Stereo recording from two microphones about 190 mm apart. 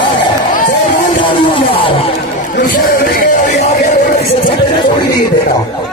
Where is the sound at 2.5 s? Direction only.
50° left (ahead or behind).